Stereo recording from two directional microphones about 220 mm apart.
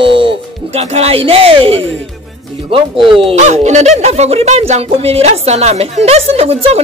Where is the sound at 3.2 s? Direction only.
30° right (ahead or behind).